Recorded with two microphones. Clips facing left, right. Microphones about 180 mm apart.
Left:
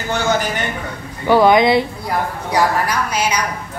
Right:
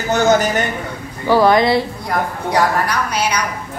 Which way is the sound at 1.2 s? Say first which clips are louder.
Left 1 dB; 20° left (ahead or behind).